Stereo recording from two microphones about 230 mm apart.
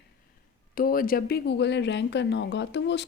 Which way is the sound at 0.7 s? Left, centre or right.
Left.